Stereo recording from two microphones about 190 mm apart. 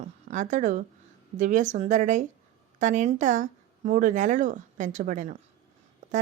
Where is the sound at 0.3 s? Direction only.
40° right (ahead or behind).